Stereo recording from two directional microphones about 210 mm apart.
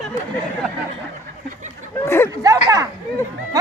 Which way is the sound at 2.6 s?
15° right (ahead or behind).